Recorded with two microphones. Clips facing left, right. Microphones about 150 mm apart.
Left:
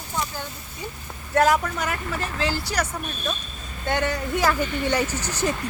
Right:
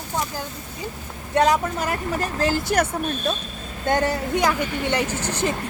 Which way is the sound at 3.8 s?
40° right (ahead or behind).